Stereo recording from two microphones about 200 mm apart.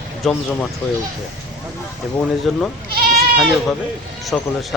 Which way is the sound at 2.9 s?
50° right (ahead or behind).